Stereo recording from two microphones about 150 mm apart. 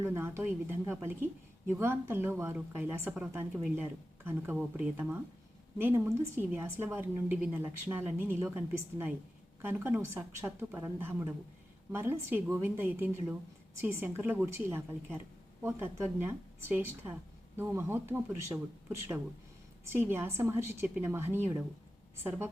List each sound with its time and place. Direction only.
0.0 s a woman's voice: 15° right (ahead or behind)